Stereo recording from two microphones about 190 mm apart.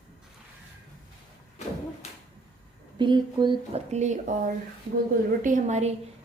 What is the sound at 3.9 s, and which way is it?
A woman's voice, 40° right (ahead or behind).